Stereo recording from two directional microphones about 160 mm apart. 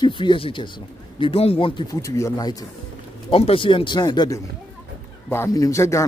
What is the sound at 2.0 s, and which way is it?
Speech, 20° left (ahead or behind).